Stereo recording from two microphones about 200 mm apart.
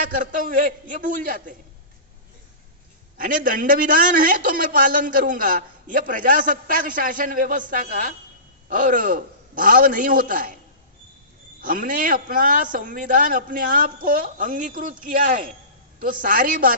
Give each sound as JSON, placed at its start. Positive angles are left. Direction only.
{"t": 0.2, "sound": "a man's voice", "side_deg": -40}
{"t": 3.2, "sound": "a man's voice", "side_deg": -45}
{"t": 11.6, "sound": "a man's voice", "side_deg": -45}